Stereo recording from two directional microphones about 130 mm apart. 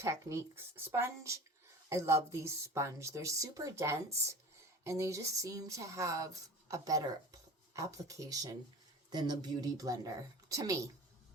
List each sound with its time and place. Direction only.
0.0 s speech: 20° right (ahead or behind)